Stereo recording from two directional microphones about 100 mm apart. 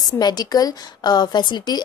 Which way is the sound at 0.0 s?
45° left (ahead or behind).